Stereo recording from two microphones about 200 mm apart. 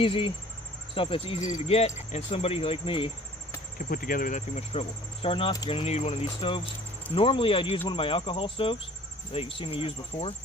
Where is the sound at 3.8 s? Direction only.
45° left (ahead or behind).